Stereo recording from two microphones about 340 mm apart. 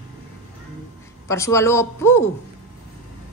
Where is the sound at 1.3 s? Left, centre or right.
Centre.